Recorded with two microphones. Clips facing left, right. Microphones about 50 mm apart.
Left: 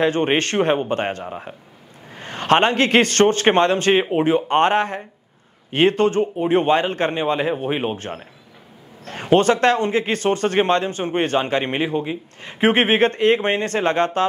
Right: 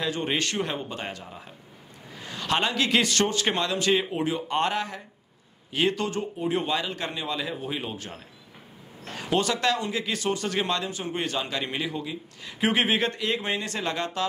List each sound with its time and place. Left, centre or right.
0.0 s a man's voice: left